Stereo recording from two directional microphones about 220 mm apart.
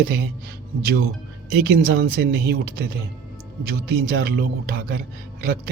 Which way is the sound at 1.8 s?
45° right (ahead or behind).